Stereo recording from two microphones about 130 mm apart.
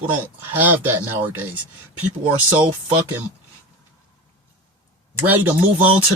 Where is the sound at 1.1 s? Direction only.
15° right (ahead or behind).